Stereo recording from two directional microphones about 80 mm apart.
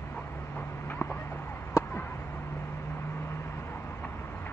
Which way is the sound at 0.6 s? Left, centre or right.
Left.